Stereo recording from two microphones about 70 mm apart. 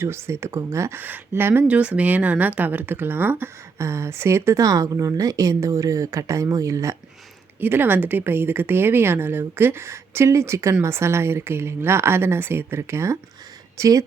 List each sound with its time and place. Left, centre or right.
0.0 s speech: right
0.9 s speech: right
1.6 s speech: centre
3.8 s a woman's voice: right
4.6 s a woman's voice: right
7.6 s speech: right
13.7 s speech: right